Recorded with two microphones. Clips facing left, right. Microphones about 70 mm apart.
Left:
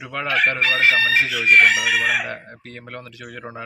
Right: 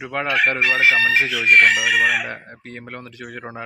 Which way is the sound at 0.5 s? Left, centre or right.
Centre.